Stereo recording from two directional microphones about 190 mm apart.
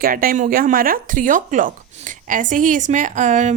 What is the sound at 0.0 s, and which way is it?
Speech, 50° right (ahead or behind).